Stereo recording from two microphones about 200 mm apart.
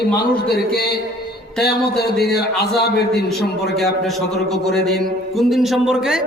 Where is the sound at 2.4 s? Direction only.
55° left (ahead or behind).